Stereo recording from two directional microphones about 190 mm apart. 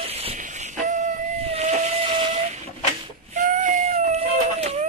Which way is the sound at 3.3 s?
40° right (ahead or behind).